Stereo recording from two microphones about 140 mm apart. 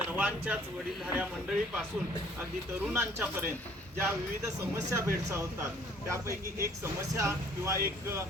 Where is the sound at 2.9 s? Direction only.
15° right (ahead or behind).